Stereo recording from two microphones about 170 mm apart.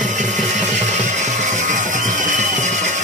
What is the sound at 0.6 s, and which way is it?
Music, 45° right (ahead or behind).